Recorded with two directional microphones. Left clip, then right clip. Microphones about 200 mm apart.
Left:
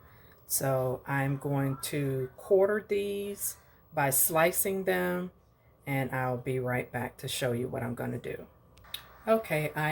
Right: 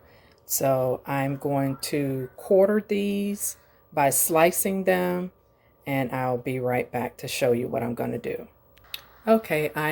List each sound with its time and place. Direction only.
0.4 s speech: 40° right (ahead or behind)